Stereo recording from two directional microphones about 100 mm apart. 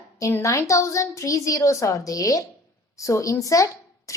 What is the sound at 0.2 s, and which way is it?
A woman's voice, 30° left (ahead or behind).